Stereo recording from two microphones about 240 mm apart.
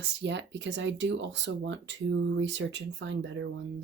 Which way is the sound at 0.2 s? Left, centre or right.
Right.